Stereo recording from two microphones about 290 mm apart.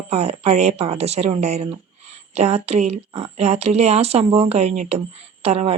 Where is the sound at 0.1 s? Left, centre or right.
Right.